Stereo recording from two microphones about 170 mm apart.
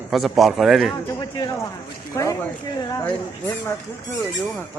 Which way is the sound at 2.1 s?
20° left (ahead or behind).